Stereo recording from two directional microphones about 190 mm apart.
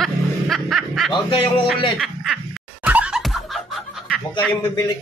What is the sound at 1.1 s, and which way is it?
Speech, 25° left (ahead or behind).